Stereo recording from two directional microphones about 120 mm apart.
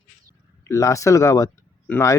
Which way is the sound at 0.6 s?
25° left (ahead or behind).